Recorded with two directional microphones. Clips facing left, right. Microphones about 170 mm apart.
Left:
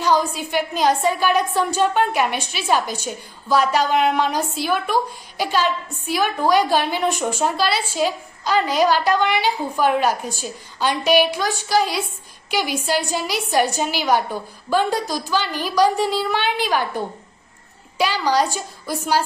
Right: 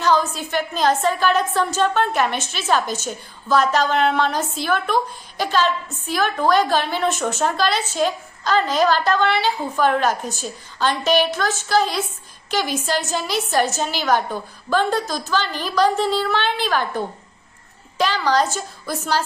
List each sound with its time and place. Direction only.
0.0 s a woman's voice: 10° left (ahead or behind)